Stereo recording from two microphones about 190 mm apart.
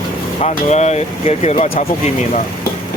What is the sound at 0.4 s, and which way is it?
Speech, 35° left (ahead or behind).